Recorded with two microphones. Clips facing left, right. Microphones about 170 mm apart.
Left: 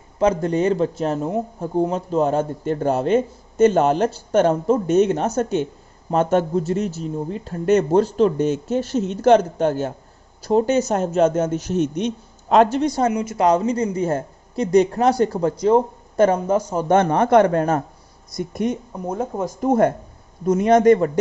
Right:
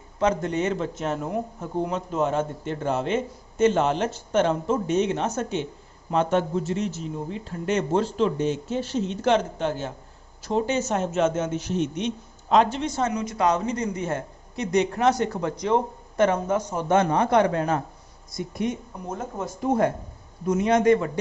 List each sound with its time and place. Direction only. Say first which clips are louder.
0.2 s a man's voice: left 5 dB; 35° left (ahead or behind)
13.1 s a man's voice: left 5 dB; 25° left (ahead or behind)
16.7 s a man's voice: left 3 dB; 50° left (ahead or behind)